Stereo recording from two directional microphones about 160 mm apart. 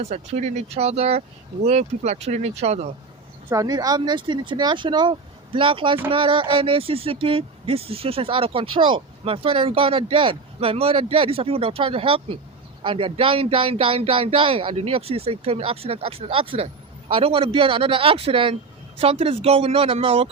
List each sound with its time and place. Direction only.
0.0 s speech: 45° right (ahead or behind)
3.5 s speech: 20° right (ahead or behind)